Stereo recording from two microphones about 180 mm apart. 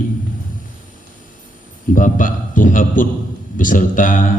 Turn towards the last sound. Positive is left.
turn(degrees=50)  # may be behind; listen again after turning